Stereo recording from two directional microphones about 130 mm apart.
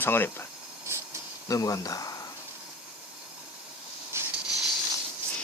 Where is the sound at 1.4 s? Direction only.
25° left (ahead or behind).